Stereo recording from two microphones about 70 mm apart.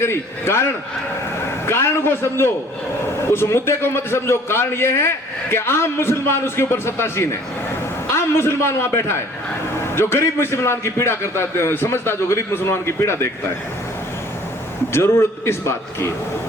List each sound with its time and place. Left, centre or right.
0.0 s a man's voice: left
14.9 s a man's voice: left